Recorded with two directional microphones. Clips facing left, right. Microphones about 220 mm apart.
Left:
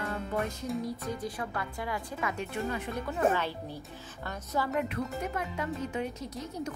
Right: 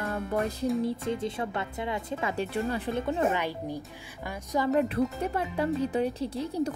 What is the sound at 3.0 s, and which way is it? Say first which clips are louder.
Speech: left 1 dB; 15° right (ahead or behind).